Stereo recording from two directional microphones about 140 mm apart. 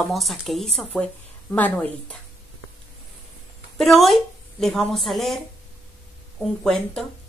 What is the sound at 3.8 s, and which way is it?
Speech, centre (ahead or behind).